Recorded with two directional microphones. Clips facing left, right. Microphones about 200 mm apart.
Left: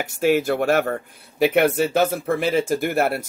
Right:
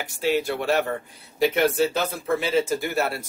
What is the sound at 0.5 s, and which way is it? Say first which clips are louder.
Speech: left 4 dB; 50° left (ahead or behind).